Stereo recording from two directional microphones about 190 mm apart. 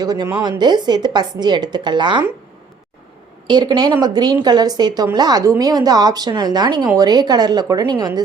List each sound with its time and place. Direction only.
0.0 s a woman's voice: 20° right (ahead or behind)
3.4 s a woman's voice: 25° right (ahead or behind)